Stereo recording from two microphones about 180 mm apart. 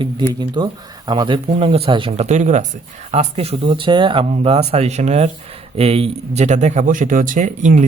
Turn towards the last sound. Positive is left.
turn(degrees=-45)  # may be behind; listen again after turning